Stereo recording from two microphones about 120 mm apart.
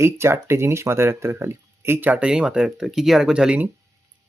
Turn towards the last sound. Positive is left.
turn(degrees=-10)  # may be behind; listen again after turning